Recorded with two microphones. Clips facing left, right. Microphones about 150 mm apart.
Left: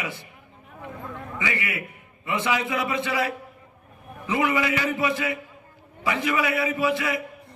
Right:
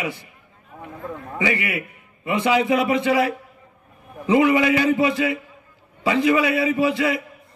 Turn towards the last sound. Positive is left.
turn(degrees=-20)  # may be behind; listen again after turning